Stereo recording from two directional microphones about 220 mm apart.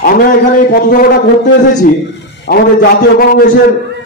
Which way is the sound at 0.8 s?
45° left (ahead or behind).